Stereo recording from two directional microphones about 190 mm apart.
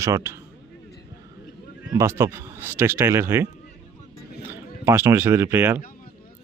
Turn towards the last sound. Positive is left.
turn(degrees=-10)  # may be behind; listen again after turning